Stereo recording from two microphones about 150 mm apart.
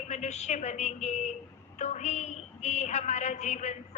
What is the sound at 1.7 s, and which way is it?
A woman's voice, 50° left (ahead or behind).